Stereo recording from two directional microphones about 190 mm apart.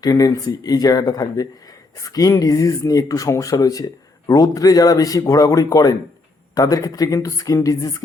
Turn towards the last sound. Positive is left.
turn(degrees=15)  # may be behind; listen again after turning